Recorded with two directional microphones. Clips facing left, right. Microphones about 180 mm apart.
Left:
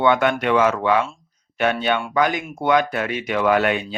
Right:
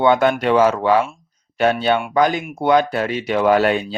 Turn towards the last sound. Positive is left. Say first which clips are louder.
# right 3 dB
turn(degrees=-35)  # may be behind; listen again after turning